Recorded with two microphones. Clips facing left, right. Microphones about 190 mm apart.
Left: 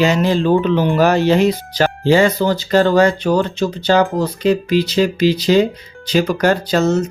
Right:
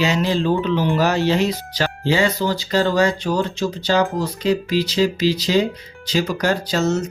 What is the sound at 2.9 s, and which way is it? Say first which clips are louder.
Speech: left 5 dB; 55° left (ahead or behind).